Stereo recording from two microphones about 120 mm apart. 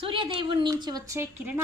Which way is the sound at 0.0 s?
45° right (ahead or behind).